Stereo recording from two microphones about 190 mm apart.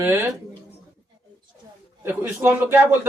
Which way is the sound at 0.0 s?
15° right (ahead or behind).